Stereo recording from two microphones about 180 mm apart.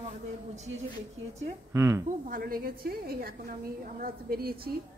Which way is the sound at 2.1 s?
50° right (ahead or behind).